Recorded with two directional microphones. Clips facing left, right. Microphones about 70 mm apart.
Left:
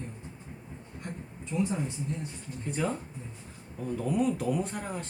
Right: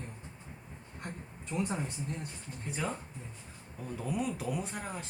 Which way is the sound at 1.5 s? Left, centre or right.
Right.